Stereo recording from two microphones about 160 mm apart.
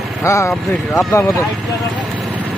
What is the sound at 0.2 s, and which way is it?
Speech, 20° left (ahead or behind).